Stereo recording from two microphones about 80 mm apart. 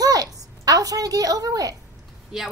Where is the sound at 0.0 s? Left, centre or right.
Right.